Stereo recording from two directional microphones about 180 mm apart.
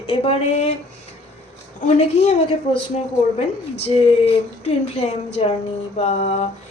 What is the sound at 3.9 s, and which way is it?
A woman's voice, 35° left (ahead or behind).